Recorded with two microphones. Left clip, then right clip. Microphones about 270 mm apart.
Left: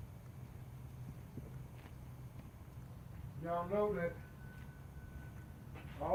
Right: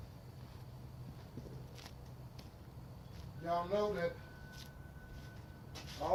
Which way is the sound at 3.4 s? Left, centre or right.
Right.